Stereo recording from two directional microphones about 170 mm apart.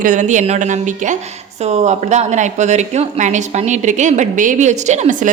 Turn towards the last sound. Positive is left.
turn(degrees=-45)  # may be behind; listen again after turning